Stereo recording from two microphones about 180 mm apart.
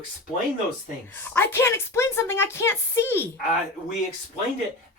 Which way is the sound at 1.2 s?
10° left (ahead or behind).